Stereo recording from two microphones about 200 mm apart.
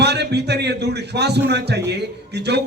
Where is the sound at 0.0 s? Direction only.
55° right (ahead or behind).